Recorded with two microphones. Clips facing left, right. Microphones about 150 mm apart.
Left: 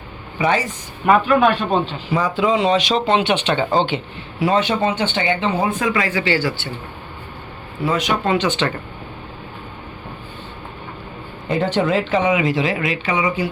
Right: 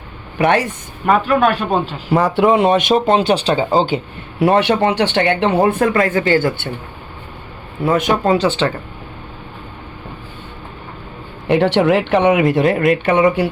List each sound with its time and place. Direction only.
0.3 s speech: 65° right (ahead or behind)
1.0 s a man's voice: centre (ahead or behind)
2.0 s speech: 65° right (ahead or behind)
3.2 s speech: 35° right (ahead or behind)
3.6 s a man's voice: 5° right (ahead or behind)
4.4 s speech: 60° right (ahead or behind)
7.9 s speech: 50° right (ahead or behind)
8.2 s speech: 35° right (ahead or behind)
11.4 s speech: 70° right (ahead or behind)